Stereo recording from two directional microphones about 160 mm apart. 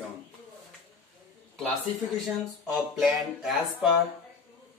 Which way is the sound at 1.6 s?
Centre (ahead or behind).